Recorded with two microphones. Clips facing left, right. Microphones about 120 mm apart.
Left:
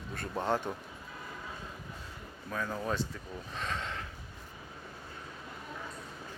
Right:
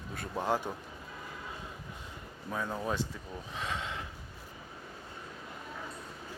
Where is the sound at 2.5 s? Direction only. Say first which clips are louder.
Even; 15° right (ahead or behind).